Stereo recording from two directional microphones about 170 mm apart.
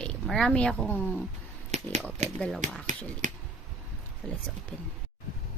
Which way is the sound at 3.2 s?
45° right (ahead or behind).